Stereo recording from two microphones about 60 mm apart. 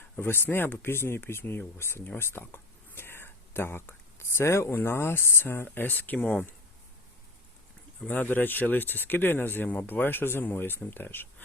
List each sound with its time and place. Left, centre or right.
0.2 s speech: left
6.1 s speech: centre
8.1 s speech: left